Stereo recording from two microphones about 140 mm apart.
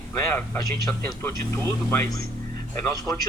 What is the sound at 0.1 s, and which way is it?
Speech, 15° left (ahead or behind).